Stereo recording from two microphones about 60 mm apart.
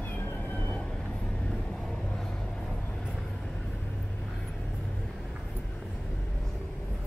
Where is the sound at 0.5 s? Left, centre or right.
Left.